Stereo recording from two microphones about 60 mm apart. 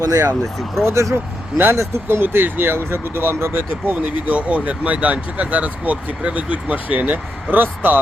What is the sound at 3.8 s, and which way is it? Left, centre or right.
Speech, right.